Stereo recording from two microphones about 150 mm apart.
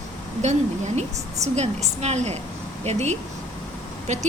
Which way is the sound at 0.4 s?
50° right (ahead or behind).